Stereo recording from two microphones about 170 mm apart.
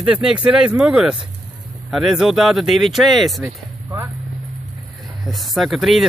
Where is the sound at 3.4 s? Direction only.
15° right (ahead or behind).